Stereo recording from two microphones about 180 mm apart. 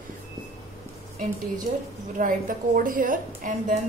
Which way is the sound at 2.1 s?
50° right (ahead or behind).